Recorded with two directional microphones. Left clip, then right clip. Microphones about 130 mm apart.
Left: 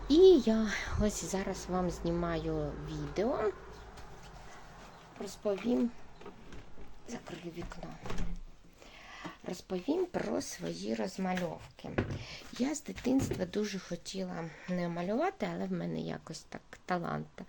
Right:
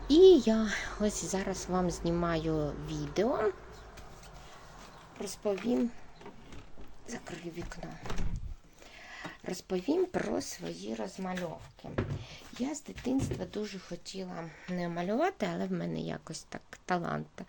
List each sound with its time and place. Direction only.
0.1 s speech: 15° right (ahead or behind); by 3.3 s 30° right (ahead or behind)
5.2 s speech: 25° right (ahead or behind)
7.1 s speech: 20° right (ahead or behind)
9.1 s a sound: 15° right (ahead or behind)
9.6 s speech: 30° right (ahead or behind)
10.3 s speech: 5° right (ahead or behind)
10.7 s speech: 15° left (ahead or behind)
14.7 s speech: centre (ahead or behind)
14.9 s speech: 20° right (ahead or behind)